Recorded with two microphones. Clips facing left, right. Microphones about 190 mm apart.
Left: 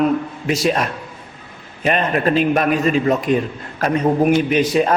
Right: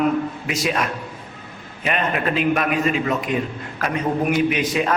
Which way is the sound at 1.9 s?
35° left (ahead or behind).